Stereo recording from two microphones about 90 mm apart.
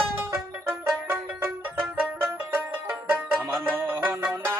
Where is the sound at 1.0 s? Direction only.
25° right (ahead or behind).